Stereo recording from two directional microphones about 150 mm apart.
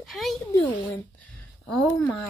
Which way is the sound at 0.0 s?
Centre (ahead or behind).